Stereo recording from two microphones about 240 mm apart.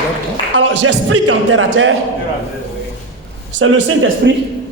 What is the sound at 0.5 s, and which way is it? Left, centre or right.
Music, right.